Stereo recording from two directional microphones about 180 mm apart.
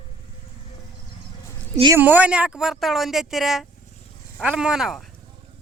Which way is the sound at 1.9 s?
10° right (ahead or behind).